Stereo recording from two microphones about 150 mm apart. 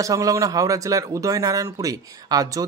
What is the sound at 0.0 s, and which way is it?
A man's voice, 20° right (ahead or behind).